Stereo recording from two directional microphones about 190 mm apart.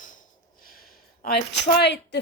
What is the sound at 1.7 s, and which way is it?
Speech, 60° left (ahead or behind).